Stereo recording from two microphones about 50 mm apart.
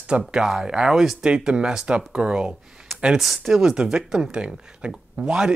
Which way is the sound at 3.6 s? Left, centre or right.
Centre.